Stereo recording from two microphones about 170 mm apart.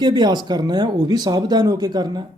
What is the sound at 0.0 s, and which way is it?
Speech, 25° right (ahead or behind).